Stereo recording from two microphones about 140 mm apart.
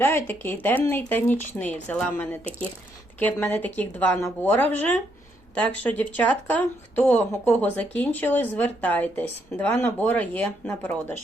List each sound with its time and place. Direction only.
0.0 s speech: 15° left (ahead or behind)